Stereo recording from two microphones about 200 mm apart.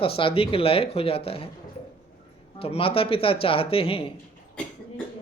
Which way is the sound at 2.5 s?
30° left (ahead or behind).